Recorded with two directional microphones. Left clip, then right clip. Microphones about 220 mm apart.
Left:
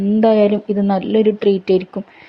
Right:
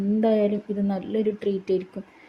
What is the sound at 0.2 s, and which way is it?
Speech, 10° left (ahead or behind).